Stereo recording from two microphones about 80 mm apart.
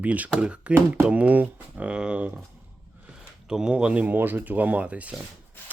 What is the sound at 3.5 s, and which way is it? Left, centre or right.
Speech, centre.